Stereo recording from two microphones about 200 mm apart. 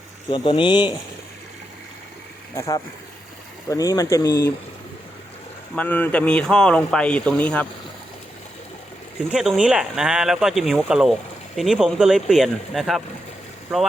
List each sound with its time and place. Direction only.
0.3 s speech: 25° left (ahead or behind)
2.6 s speech: 20° left (ahead or behind)
5.7 s speech: 10° left (ahead or behind)
9.3 s speech: 5° right (ahead or behind)